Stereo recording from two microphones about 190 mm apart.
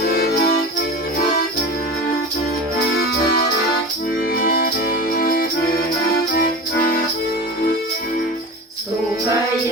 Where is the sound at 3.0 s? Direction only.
55° left (ahead or behind).